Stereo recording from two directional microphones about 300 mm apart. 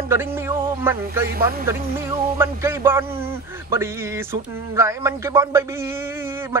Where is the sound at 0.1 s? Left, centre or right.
Centre.